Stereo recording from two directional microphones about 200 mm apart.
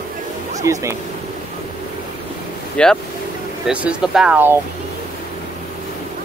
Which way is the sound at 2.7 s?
5° left (ahead or behind).